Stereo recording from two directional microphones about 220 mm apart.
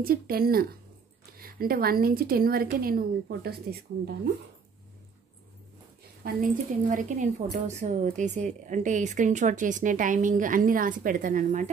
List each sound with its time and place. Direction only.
0.0 s a woman's voice: 40° right (ahead or behind)
6.2 s a woman's voice: 35° right (ahead or behind)